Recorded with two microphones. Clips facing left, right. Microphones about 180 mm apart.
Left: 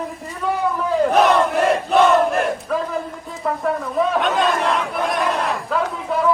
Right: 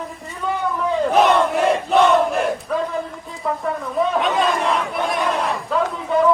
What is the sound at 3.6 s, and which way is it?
Battle cry, centre (ahead or behind).